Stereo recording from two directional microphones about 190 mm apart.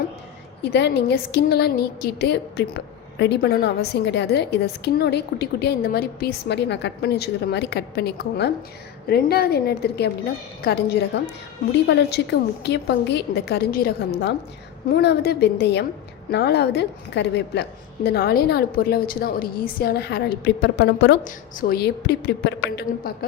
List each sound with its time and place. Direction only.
0.6 s a woman's voice: 60° left (ahead or behind)